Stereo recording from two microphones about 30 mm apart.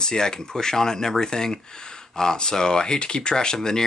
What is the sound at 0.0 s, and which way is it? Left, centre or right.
Speech, left.